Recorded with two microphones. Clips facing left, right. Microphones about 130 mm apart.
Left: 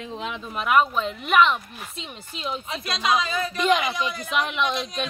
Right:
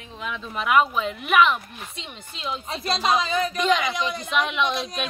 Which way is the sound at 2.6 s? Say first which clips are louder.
Right 4 dB; 35° right (ahead or behind).